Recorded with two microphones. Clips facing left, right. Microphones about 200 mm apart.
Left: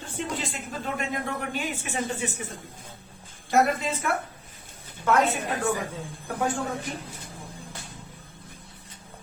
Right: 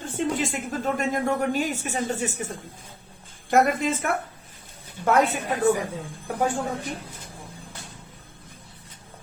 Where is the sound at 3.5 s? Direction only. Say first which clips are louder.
Right 2 dB; 50° right (ahead or behind).